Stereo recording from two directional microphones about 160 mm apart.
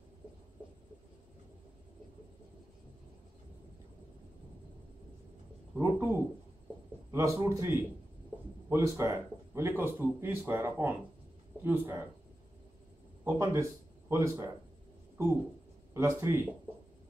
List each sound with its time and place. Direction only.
5.8 s speech: 15° right (ahead or behind)
13.2 s speech: 15° right (ahead or behind)
15.9 s speech: 20° right (ahead or behind)